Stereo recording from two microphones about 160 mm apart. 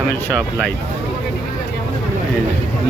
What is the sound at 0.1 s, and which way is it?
Speech, 10° left (ahead or behind).